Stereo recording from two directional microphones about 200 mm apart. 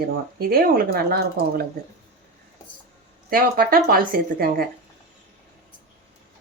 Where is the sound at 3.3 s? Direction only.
45° right (ahead or behind).